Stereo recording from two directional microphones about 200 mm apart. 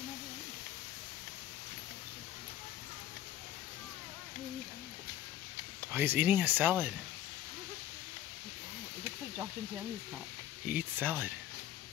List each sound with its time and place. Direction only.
5.9 s speech: 10° right (ahead or behind)
10.7 s speech: 10° right (ahead or behind)